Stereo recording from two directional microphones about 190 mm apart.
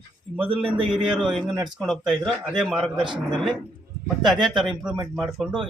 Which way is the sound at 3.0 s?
25° right (ahead or behind).